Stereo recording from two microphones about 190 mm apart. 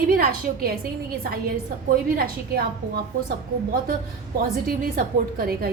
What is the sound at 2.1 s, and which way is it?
Speech, 50° right (ahead or behind).